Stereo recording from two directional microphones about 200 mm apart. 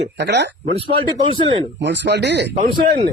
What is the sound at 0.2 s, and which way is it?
Speech, 60° right (ahead or behind).